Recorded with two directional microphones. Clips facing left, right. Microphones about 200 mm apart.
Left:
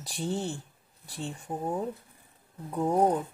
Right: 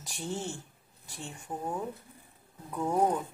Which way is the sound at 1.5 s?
20° left (ahead or behind).